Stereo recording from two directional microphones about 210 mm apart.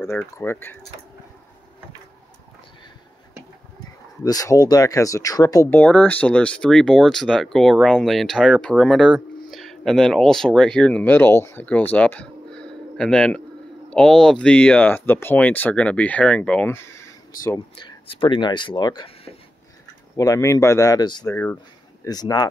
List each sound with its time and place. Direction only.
0.0 s speech: 10° left (ahead or behind)
4.2 s speech: 15° left (ahead or behind)
11.9 s a sound: 5° left (ahead or behind)
13.8 s speech: 5° left (ahead or behind)
17.5 s speech: 20° left (ahead or behind)